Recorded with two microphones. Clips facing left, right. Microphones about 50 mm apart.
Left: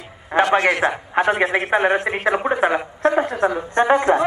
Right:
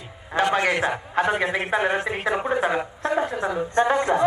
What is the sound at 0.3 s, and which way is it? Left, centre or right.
A man's voice, left.